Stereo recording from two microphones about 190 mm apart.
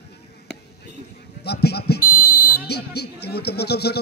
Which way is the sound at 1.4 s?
60° left (ahead or behind).